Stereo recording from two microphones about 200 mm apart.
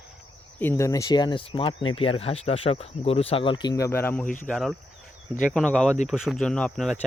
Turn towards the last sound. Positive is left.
turn(degrees=0)  # may be behind; listen again after turning